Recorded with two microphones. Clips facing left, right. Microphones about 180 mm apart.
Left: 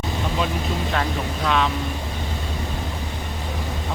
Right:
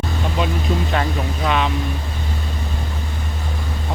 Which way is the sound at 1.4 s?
5° right (ahead or behind).